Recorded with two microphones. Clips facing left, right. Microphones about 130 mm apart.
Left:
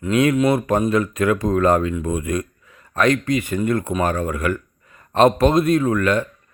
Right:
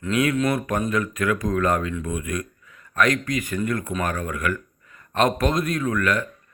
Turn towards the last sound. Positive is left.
turn(degrees=30)  # may be behind; listen again after turning